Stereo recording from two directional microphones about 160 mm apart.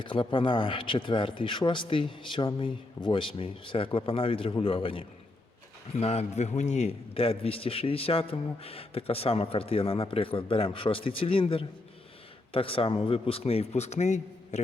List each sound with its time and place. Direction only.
0.0 s a man's voice: 30° left (ahead or behind)